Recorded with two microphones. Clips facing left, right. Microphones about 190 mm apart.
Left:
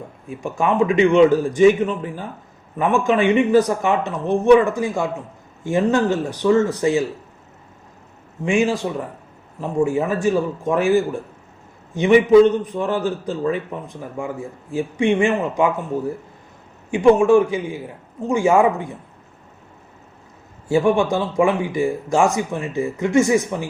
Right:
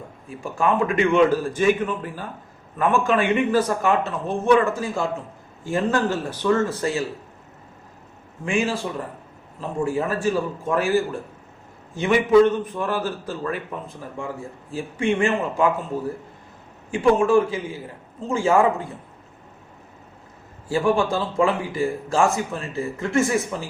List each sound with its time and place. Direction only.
0.4 s speech: 20° left (ahead or behind)
8.4 s speech: 20° left (ahead or behind)
16.9 s speech: 15° left (ahead or behind)
20.7 s speech: 20° left (ahead or behind)